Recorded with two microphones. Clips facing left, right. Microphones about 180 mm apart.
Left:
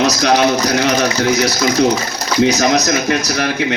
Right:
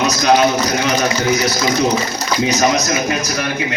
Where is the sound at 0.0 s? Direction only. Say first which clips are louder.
Even; 70° left (ahead or behind).